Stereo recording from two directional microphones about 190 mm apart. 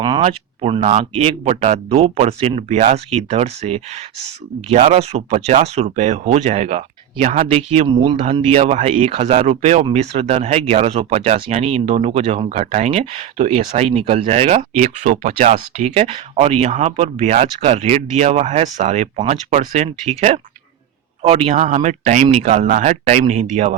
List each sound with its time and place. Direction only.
0.2 s speech: 30° right (ahead or behind)